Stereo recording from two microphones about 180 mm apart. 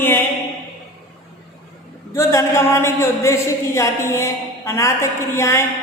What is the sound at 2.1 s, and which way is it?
Speech, 15° left (ahead or behind).